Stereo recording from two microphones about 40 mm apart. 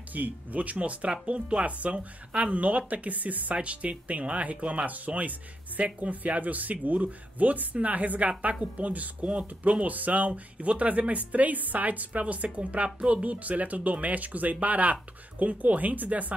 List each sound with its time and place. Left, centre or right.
0.1 s speech: right
3.5 s speech: right